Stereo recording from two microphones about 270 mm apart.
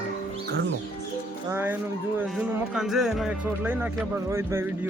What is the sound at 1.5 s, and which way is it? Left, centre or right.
Music, centre.